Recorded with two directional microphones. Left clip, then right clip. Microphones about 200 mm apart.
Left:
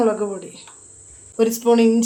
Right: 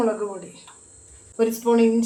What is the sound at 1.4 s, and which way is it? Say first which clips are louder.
Speech: left 3 dB; 50° left (ahead or behind).